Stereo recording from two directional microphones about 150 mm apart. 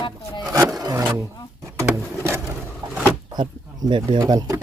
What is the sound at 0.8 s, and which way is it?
Roaring cats, 25° right (ahead or behind).